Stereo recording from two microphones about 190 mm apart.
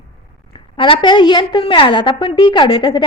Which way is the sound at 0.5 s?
25° left (ahead or behind).